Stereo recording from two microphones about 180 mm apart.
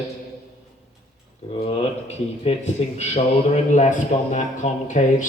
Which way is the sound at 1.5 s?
35° left (ahead or behind).